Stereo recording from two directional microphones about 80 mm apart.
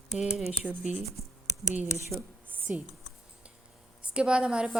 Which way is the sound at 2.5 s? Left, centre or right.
Right.